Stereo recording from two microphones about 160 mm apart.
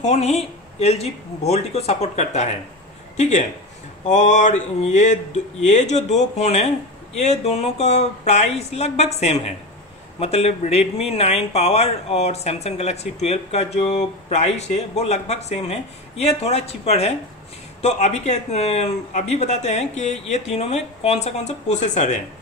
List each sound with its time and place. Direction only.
0.0 s speech: 45° left (ahead or behind)